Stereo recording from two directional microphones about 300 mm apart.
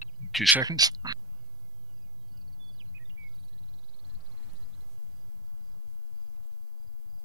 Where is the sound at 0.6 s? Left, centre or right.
Centre.